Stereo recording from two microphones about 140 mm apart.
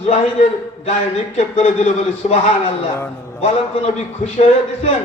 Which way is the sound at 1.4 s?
50° left (ahead or behind).